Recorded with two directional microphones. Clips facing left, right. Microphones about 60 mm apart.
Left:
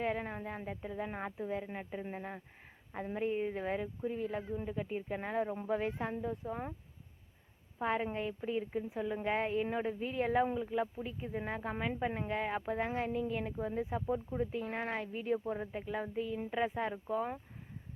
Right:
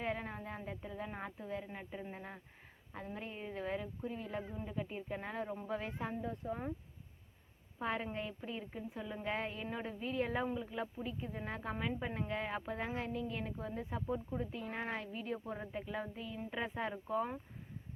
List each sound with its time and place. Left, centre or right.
0.0 s a woman's voice: centre
7.8 s a woman's voice: centre